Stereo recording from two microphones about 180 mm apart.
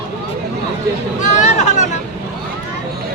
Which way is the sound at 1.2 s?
40° left (ahead or behind).